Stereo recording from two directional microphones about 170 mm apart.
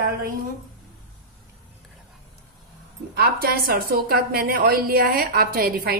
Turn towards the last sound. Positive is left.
turn(degrees=-60)  # may be behind; listen again after turning